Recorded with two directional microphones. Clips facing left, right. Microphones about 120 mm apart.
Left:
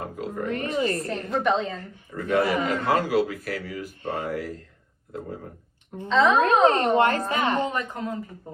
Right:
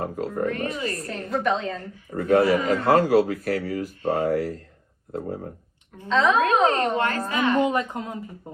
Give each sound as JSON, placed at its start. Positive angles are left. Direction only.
{"t": 0.0, "sound": "speech", "side_deg": -40}
{"t": 0.7, "sound": "a woman's voice", "side_deg": 30}
{"t": 1.0, "sound": "a woman's voice", "side_deg": 0}
{"t": 2.1, "sound": "a man's voice", "side_deg": -45}
{"t": 6.1, "sound": "a woman's voice", "side_deg": 0}
{"t": 6.7, "sound": "a woman's voice", "side_deg": 25}
{"t": 7.6, "sound": "speech", "side_deg": -20}